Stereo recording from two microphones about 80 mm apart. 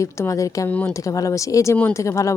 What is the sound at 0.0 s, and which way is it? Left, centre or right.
Speech, left.